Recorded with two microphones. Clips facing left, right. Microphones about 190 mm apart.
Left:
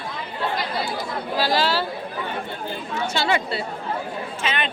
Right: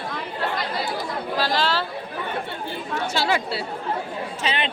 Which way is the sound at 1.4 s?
5° left (ahead or behind).